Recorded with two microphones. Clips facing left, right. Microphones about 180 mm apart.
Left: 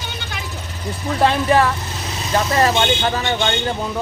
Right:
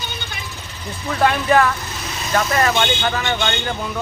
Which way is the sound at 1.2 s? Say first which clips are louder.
Even; 30° left (ahead or behind).